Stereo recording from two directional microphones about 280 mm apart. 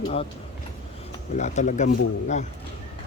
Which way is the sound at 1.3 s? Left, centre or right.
Left.